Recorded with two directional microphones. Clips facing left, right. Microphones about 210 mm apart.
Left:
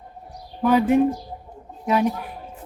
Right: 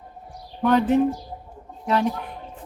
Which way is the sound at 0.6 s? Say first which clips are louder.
Left 1 dB; 10° left (ahead or behind).